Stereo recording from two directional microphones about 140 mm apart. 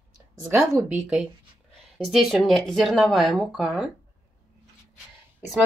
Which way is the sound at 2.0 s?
Centre (ahead or behind).